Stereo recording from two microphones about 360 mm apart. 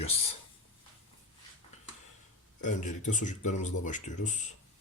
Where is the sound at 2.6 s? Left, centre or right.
Left.